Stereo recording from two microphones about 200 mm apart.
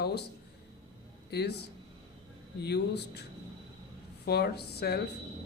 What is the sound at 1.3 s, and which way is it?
Speech, 55° left (ahead or behind).